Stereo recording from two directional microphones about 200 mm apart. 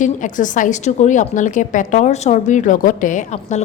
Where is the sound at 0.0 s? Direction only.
40° left (ahead or behind).